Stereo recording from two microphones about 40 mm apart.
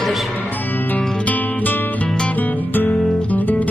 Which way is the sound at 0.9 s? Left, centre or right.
Left.